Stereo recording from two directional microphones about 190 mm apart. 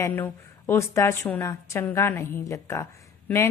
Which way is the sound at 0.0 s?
10° left (ahead or behind).